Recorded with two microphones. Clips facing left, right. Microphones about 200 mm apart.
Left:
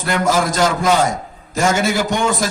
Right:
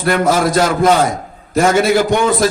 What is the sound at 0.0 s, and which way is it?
A man's voice, 55° right (ahead or behind).